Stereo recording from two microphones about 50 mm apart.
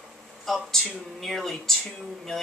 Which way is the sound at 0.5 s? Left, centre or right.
Centre.